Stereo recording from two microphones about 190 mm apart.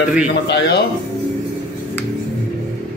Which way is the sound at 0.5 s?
60° left (ahead or behind).